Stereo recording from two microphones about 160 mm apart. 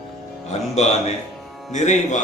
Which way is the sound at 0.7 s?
45° left (ahead or behind).